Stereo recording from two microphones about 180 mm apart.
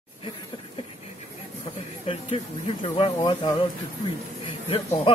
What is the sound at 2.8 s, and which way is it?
Speech, 30° left (ahead or behind).